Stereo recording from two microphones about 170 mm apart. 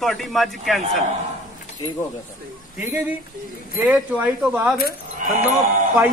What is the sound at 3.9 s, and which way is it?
Speech, 5° right (ahead or behind).